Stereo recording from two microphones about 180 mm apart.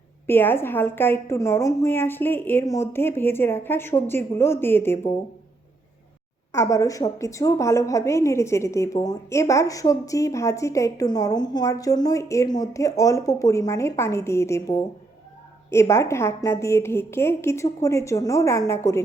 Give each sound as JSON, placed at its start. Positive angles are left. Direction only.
{"t": 0.3, "sound": "a woman's voice", "side_deg": 10}
{"t": 6.5, "sound": "a woman's voice", "side_deg": 15}